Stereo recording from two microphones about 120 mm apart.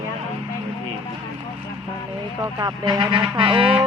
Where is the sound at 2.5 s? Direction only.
35° right (ahead or behind).